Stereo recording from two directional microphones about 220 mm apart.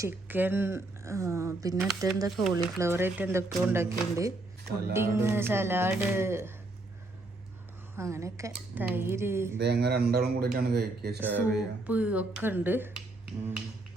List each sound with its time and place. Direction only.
0.0 s speech: 10° right (ahead or behind)
7.9 s speech: 15° right (ahead or behind)
9.6 s speech: 50° right (ahead or behind)
11.2 s speech: 10° right (ahead or behind)